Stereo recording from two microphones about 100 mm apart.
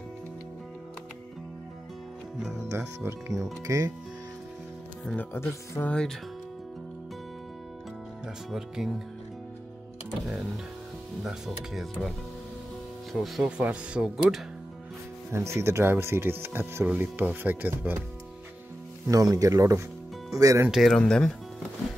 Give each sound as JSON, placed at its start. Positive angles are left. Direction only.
{"t": 2.7, "sound": "speech", "side_deg": -30}
{"t": 5.1, "sound": "speech", "side_deg": 25}
{"t": 5.9, "sound": "speech", "side_deg": 10}
{"t": 8.5, "sound": "speech", "side_deg": -5}
{"t": 11.2, "sound": "speech", "side_deg": -5}
{"t": 13.1, "sound": "speech", "side_deg": 0}
{"t": 13.5, "sound": "speech", "side_deg": -10}
{"t": 15.3, "sound": "speech", "side_deg": -30}
{"t": 19.0, "sound": "speech", "side_deg": -35}
{"t": 20.9, "sound": "speech", "side_deg": 5}